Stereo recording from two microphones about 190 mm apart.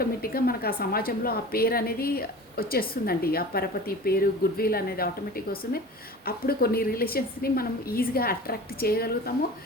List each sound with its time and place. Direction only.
0.0 s a woman's voice: 50° left (ahead or behind)
6.2 s a woman's voice: 55° left (ahead or behind)